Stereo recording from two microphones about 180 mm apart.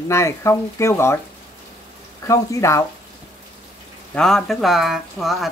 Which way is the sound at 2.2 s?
15° left (ahead or behind).